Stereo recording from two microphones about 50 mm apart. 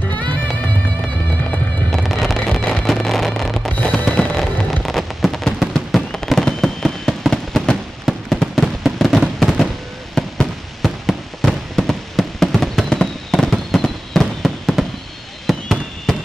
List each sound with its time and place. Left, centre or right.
1.9 s fireworks: centre
3.7 s fireworks: left
4.6 s fireworks: centre